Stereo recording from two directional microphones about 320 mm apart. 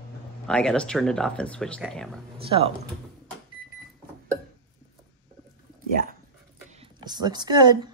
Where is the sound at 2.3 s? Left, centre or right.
Centre.